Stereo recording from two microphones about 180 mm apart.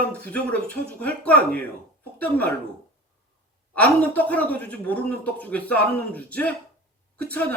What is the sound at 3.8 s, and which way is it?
A man's voice, 10° left (ahead or behind).